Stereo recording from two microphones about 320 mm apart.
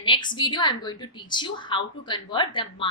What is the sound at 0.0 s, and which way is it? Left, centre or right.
A woman's voice, centre.